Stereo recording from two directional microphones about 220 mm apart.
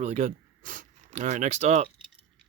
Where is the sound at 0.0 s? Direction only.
30° right (ahead or behind).